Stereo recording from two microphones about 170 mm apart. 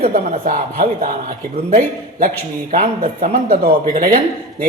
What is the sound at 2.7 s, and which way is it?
A man's voice, 50° right (ahead or behind).